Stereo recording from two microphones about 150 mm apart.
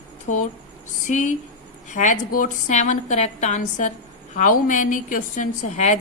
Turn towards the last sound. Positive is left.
turn(degrees=50)  # may be behind; listen again after turning